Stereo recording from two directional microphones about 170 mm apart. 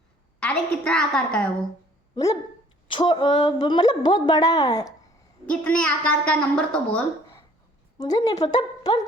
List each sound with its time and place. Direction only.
0.3 s a woman's voice: 5° left (ahead or behind)
2.1 s a woman's voice: 20° left (ahead or behind)
5.5 s a woman's voice: 5° left (ahead or behind)
7.9 s a woman's voice: 20° left (ahead or behind)